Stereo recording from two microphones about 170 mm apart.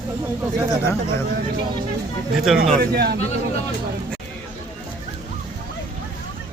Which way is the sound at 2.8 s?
70° right (ahead or behind).